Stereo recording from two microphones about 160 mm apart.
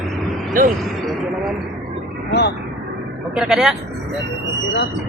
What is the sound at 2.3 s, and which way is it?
Speech, 90° left.